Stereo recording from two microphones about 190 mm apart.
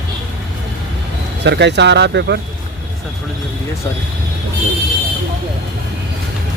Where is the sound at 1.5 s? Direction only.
65° right (ahead or behind).